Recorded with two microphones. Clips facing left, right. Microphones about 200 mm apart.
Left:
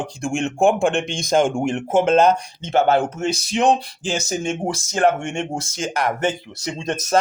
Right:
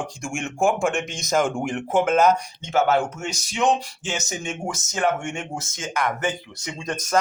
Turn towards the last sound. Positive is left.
turn(degrees=25)  # may be behind; listen again after turning